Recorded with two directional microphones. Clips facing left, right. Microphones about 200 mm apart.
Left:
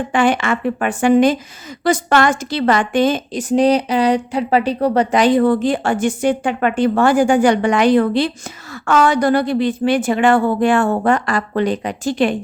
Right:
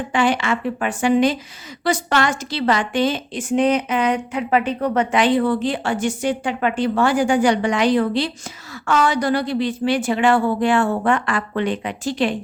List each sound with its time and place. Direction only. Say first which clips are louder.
0.1 s a woman's voice: left 3 dB; 50° left (ahead or behind)